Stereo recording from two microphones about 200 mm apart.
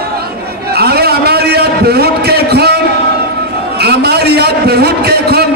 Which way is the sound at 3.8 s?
55° right (ahead or behind).